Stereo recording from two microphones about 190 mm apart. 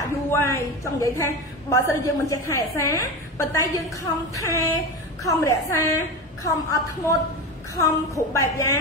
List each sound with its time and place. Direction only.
0.0 s a woman's voice: 15° left (ahead or behind)